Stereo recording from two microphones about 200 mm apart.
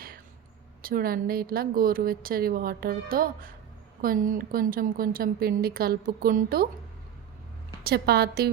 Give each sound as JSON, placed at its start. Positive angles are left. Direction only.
{"t": 0.8, "sound": "a woman's voice", "side_deg": -45}
{"t": 7.9, "sound": "a woman's voice", "side_deg": -50}